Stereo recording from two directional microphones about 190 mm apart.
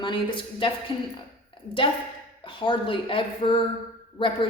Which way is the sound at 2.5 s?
25° left (ahead or behind).